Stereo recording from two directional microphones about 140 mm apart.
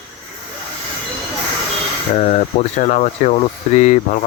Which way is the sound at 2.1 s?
50° left (ahead or behind).